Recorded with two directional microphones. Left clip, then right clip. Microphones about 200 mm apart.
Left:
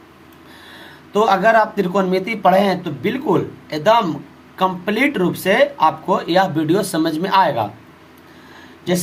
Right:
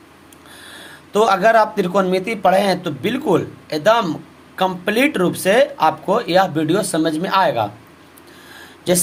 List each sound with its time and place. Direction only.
1.1 s speech: 15° right (ahead or behind)